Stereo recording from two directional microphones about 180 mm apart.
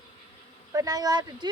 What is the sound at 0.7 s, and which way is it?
Speech, 20° right (ahead or behind).